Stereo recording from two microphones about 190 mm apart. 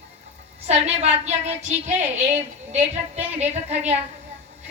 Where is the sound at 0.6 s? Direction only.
35° right (ahead or behind).